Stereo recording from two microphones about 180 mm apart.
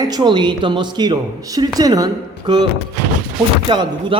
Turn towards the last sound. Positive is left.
turn(degrees=-25)  # may be behind; listen again after turning